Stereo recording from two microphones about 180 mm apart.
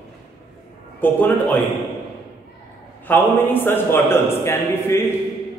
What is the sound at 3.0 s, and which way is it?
A man's voice, 10° left (ahead or behind).